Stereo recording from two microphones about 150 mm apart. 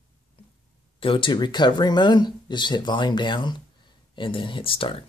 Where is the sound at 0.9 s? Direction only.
35° left (ahead or behind).